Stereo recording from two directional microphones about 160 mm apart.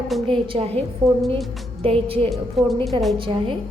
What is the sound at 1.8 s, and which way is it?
Speech, 35° right (ahead or behind).